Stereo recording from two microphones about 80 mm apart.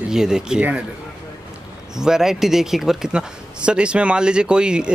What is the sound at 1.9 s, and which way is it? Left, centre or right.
Speech, centre.